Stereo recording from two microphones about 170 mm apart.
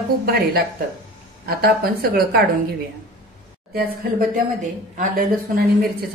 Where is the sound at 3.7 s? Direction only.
60° right (ahead or behind).